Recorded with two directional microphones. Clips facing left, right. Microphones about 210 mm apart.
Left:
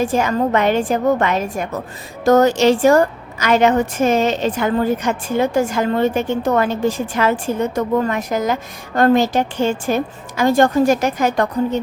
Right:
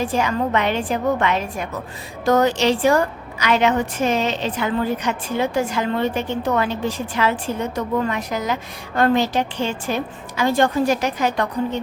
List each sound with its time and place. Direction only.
0.0 s a woman's voice: 45° left (ahead or behind)